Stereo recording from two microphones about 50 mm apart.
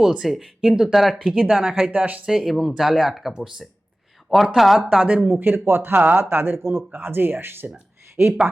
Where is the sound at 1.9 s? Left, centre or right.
Right.